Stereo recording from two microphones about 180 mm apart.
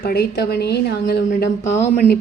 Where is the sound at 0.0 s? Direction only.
60° left (ahead or behind).